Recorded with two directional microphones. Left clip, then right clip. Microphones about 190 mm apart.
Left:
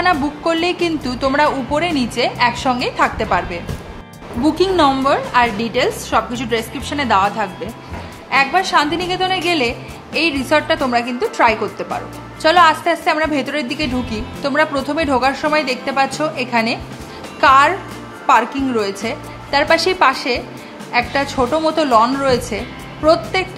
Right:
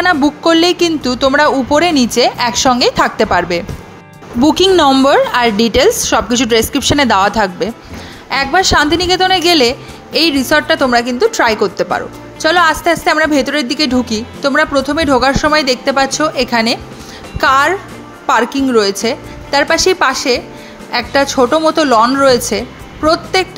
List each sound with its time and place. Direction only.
0.1 s a woman's voice: 25° right (ahead or behind)